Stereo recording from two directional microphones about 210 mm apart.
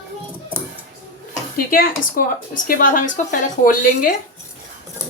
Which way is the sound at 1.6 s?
45° left (ahead or behind).